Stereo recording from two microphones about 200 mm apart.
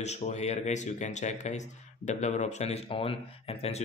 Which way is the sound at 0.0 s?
35° left (ahead or behind).